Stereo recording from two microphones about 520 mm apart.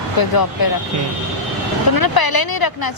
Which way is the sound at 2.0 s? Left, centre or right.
Left.